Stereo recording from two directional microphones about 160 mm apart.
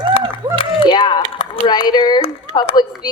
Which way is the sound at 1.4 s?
25° left (ahead or behind).